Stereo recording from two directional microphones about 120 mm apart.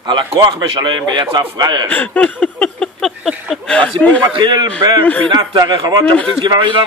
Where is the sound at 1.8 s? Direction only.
15° left (ahead or behind).